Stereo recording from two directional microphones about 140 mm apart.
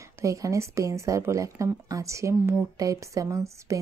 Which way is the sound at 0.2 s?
25° right (ahead or behind).